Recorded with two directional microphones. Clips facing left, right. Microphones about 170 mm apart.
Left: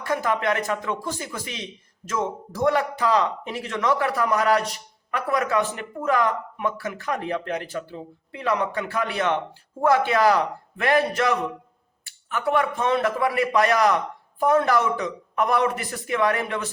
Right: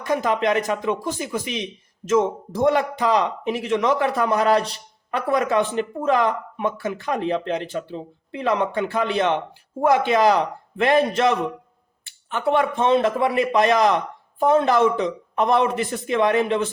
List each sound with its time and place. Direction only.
0.0 s speech: 20° right (ahead or behind)